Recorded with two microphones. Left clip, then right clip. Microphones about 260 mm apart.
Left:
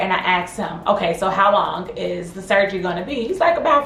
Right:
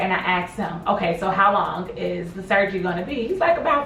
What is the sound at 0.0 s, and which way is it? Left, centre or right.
Speech, left.